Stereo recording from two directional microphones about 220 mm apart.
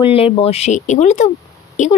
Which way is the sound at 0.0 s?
25° left (ahead or behind).